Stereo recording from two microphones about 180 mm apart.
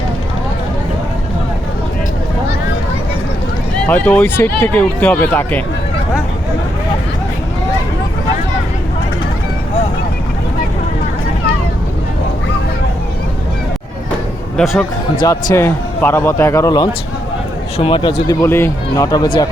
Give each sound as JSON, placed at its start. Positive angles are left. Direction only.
{"t": 3.8, "sound": "speech", "side_deg": 10}
{"t": 14.5, "sound": "speech", "side_deg": 0}
{"t": 15.2, "sound": "speech", "side_deg": 20}